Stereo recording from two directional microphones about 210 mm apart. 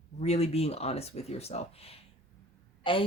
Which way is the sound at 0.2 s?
30° left (ahead or behind).